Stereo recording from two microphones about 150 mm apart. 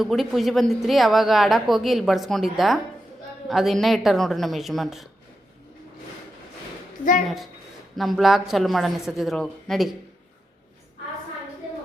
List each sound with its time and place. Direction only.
0.0 s speech: centre (ahead or behind)
7.0 s a woman's voice: 65° left (ahead or behind)
7.9 s speech: centre (ahead or behind)